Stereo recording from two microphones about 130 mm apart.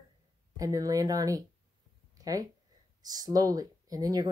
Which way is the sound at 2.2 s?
30° right (ahead or behind).